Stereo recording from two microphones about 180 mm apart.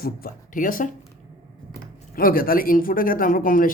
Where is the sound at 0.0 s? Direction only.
55° left (ahead or behind).